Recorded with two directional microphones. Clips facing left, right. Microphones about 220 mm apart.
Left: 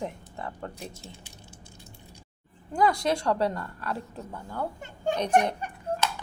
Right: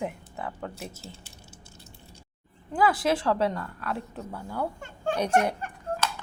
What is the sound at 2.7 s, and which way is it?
A woman's voice, 5° right (ahead or behind).